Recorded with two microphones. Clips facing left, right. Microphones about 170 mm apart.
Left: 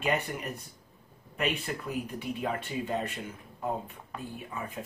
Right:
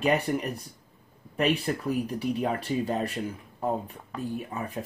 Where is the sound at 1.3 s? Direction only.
35° right (ahead or behind).